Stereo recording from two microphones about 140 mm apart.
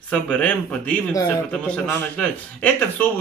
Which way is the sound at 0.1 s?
10° left (ahead or behind).